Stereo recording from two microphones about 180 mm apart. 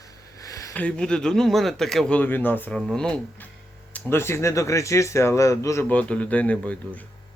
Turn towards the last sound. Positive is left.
turn(degrees=5)  # may be behind; listen again after turning